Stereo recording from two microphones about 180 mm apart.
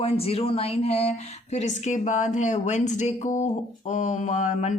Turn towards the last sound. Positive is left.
turn(degrees=40)  # may be behind; listen again after turning